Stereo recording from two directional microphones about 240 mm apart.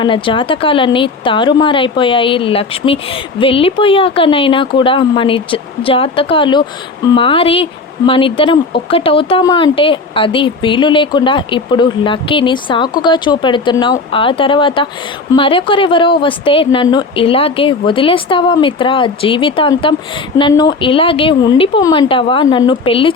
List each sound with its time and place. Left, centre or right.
0.0 s speech: left